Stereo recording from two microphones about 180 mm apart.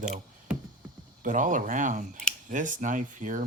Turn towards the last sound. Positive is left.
turn(degrees=-45)  # may be behind; listen again after turning